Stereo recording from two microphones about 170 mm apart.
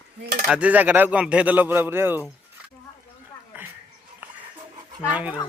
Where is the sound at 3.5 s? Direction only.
10° right (ahead or behind).